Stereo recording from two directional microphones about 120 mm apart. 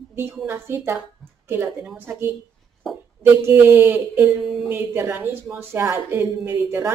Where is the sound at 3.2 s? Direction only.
20° right (ahead or behind).